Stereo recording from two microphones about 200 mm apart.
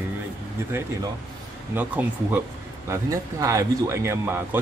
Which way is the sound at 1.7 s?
10° right (ahead or behind).